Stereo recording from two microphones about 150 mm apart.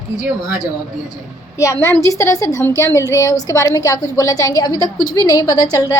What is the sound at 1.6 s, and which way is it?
A woman's voice, 20° left (ahead or behind).